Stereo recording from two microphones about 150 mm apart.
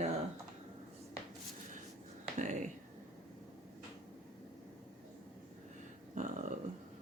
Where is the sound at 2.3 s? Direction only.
55° right (ahead or behind).